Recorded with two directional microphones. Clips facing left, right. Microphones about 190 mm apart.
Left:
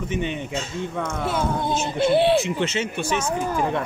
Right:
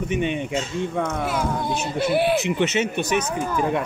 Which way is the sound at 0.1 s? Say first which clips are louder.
Right 3 dB; 15° right (ahead or behind).